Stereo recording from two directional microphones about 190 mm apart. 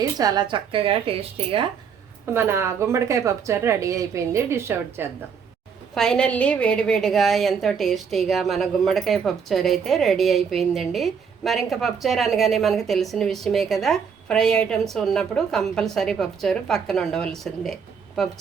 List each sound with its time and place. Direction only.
0.2 s speech: 20° right (ahead or behind)
2.3 s speech: 15° right (ahead or behind)
5.9 s a woman's voice: 5° left (ahead or behind)